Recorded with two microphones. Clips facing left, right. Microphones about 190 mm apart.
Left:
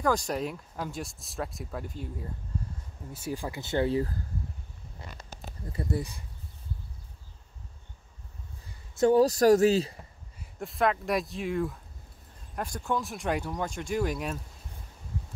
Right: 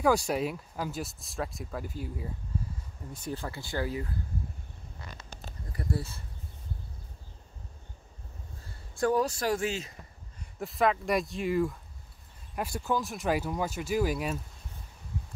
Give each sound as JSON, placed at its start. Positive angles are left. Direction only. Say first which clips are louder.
{"t": 0.0, "sound": "speech", "louder": "right 2 dB", "side_deg": -10}
{"t": 3.1, "sound": "speech", "louder": "left 2 dB", "side_deg": 10}
{"t": 5.7, "sound": "speech", "louder": "left 2 dB", "side_deg": 20}
{"t": 8.6, "sound": "a sound", "louder": "left 5 dB", "side_deg": 20}
{"t": 9.2, "sound": "speech", "louder": "left 9 dB", "side_deg": 40}
{"t": 10.4, "sound": "speech", "louder": "even", "side_deg": 0}